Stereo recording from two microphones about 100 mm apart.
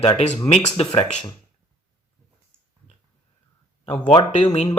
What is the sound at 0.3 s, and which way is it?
Speech, 70° left (ahead or behind).